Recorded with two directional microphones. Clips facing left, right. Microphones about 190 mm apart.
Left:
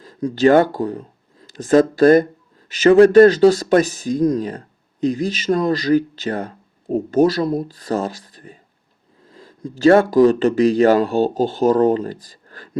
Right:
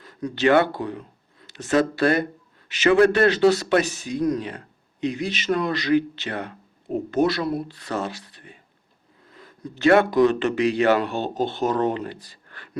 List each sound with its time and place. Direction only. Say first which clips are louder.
0.0 s speech: left 6 dB; 35° left (ahead or behind)